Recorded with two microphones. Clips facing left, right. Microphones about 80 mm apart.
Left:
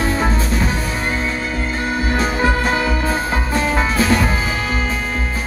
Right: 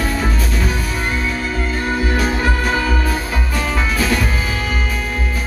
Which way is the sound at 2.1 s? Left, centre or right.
Left.